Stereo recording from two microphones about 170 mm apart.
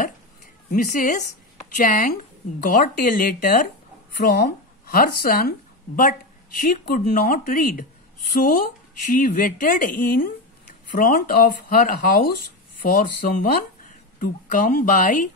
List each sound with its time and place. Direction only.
0.7 s speech: 55° left (ahead or behind)
4.2 s speech: 65° left (ahead or behind)
6.6 s speech: 60° left (ahead or behind)